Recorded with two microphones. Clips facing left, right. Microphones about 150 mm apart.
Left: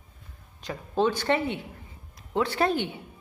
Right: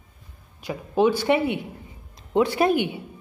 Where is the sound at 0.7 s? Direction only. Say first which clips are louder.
Right 5 dB; 10° right (ahead or behind).